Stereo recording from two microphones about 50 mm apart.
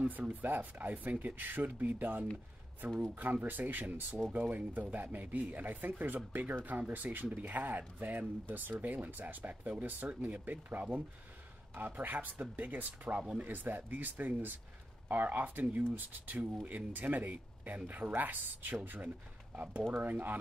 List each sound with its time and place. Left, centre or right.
0.3 s speech: right